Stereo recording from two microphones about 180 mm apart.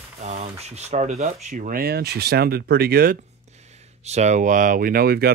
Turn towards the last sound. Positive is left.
turn(degrees=-60)  # may be behind; listen again after turning